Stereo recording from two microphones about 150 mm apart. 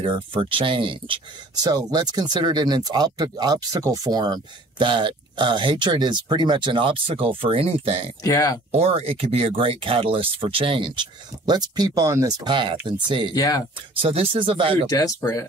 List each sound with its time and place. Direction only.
0.0 s speech: 35° right (ahead or behind)
8.2 s speech: 25° left (ahead or behind)
8.7 s speech: 40° right (ahead or behind)
13.3 s speech: 25° left (ahead or behind)
13.9 s speech: 35° right (ahead or behind)
14.9 s speech: 20° left (ahead or behind)